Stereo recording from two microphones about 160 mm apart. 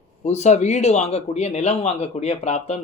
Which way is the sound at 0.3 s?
45° left (ahead or behind).